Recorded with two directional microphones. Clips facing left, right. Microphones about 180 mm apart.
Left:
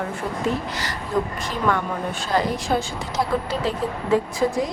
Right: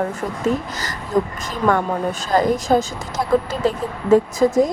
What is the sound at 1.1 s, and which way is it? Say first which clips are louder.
Speech: right 4 dB; 45° right (ahead or behind).